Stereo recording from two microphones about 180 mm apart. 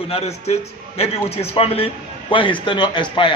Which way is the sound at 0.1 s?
35° left (ahead or behind).